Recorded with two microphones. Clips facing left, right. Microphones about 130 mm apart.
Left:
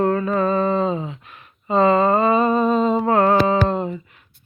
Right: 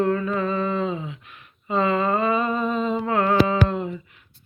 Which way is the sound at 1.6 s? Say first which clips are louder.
Left 6 dB; 35° left (ahead or behind).